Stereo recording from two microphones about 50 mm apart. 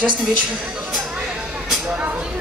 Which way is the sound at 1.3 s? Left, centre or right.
Right.